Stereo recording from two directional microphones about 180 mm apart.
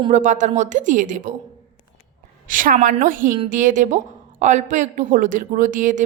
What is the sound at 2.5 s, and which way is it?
A woman's voice, 45° right (ahead or behind).